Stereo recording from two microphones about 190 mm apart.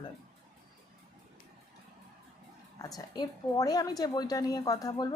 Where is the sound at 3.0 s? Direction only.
20° left (ahead or behind).